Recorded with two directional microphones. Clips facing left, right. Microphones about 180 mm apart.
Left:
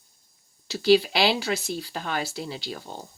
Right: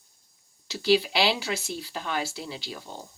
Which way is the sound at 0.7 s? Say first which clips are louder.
Left 4 dB; 50° left (ahead or behind).